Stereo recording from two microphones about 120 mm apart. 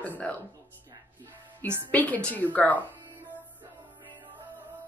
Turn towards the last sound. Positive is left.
turn(degrees=-15)  # may be behind; listen again after turning